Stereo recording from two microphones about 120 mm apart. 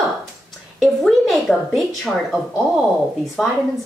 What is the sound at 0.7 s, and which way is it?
A woman's voice, centre (ahead or behind).